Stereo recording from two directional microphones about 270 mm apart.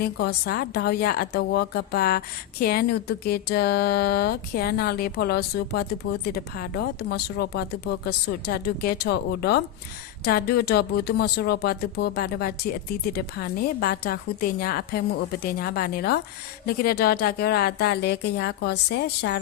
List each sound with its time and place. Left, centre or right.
0.0 s a woman's voice: left